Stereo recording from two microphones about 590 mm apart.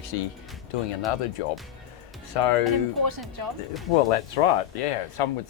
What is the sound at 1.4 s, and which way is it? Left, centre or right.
Speech, left.